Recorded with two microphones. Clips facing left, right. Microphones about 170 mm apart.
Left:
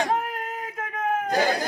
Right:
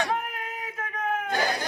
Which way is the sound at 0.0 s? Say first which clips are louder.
Left 3 dB; 35° left (ahead or behind).